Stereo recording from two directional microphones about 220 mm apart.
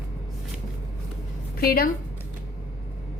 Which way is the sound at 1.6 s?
45° left (ahead or behind).